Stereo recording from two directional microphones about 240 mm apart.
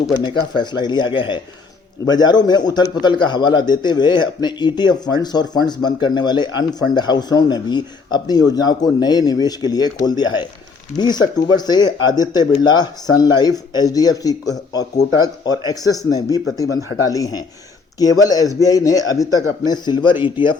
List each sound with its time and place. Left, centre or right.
0.2 s a man's voice: centre